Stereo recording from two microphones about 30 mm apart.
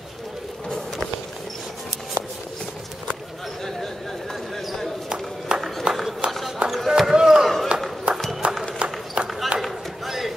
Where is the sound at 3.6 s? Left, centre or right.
Centre.